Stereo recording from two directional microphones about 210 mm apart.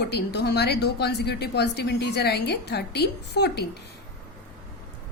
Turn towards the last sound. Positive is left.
turn(degrees=50)  # may be behind; listen again after turning